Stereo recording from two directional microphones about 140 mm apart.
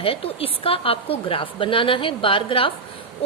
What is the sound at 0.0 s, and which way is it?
A woman's voice, 40° left (ahead or behind).